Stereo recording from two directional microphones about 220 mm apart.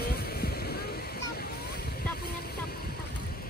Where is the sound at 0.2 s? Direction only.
45° left (ahead or behind).